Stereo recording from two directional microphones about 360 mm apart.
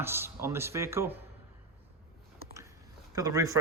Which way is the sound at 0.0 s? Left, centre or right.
Centre.